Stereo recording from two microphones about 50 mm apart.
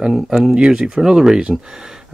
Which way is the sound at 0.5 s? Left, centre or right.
Centre.